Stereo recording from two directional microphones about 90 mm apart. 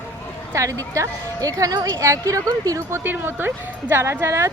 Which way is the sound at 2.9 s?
25° right (ahead or behind).